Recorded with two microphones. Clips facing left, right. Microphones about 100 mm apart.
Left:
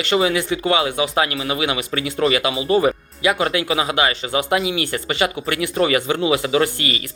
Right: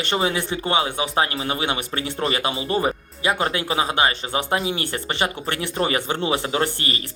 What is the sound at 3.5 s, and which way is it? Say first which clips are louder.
Speech: left 2 dB; 35° right (ahead or behind).